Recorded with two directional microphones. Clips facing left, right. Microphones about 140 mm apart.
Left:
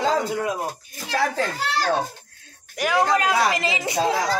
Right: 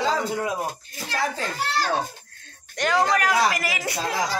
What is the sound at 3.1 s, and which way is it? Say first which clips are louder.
Speech: left 1 dB; 25° left (ahead or behind).